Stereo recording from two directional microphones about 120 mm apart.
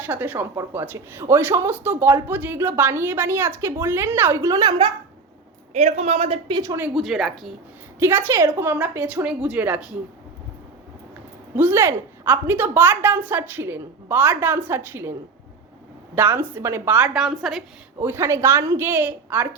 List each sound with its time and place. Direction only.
0.0 s speech: 15° right (ahead or behind); by 4.9 s 30° right (ahead or behind)
5.7 s a man's voice: 65° right (ahead or behind)
6.5 s speech: 30° right (ahead or behind)
6.9 s a woman's voice: centre (ahead or behind)
7.9 s a woman's voice: 20° right (ahead or behind)
11.5 s a woman's voice: 20° right (ahead or behind)
16.1 s a woman's voice: 15° right (ahead or behind)
17.2 s a woman's voice: centre (ahead or behind)
18.0 s speech: 20° right (ahead or behind)